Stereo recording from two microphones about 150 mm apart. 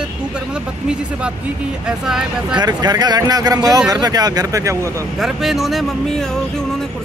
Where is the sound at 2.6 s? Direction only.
25° right (ahead or behind).